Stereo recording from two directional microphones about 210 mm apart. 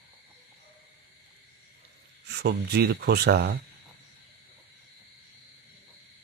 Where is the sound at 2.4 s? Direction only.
50° right (ahead or behind).